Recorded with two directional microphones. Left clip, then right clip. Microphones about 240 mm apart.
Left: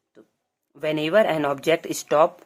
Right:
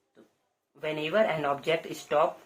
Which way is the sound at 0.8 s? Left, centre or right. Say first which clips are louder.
Left 7 dB; left.